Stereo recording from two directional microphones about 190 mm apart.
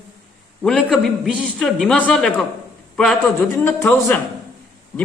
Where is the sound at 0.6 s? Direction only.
Centre (ahead or behind).